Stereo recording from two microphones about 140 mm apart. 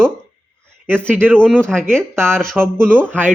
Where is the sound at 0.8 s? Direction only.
15° right (ahead or behind).